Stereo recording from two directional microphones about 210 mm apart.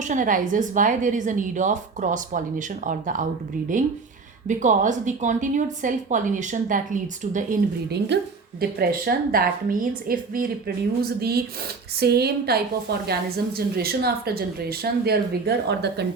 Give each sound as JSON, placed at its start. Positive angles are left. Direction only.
{"t": 0.0, "sound": "a woman's voice", "side_deg": -35}
{"t": 4.4, "sound": "a woman's voice", "side_deg": -35}
{"t": 7.9, "sound": "speech", "side_deg": -55}